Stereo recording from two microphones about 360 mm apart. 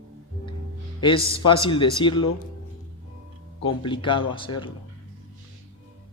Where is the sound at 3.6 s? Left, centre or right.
Centre.